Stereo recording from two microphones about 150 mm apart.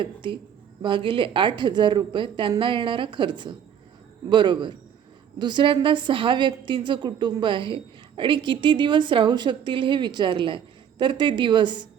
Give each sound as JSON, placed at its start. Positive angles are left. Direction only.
{"t": 0.0, "sound": "a woman's voice", "side_deg": -35}